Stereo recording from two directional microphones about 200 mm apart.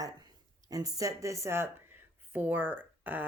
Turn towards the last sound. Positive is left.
turn(degrees=-10)  # may be behind; listen again after turning